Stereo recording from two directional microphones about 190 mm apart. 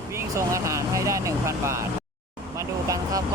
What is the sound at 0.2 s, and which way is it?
Speech, 15° right (ahead or behind).